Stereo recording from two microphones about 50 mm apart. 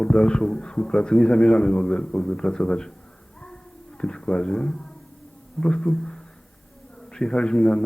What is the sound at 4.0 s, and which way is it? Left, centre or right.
A man's voice, centre.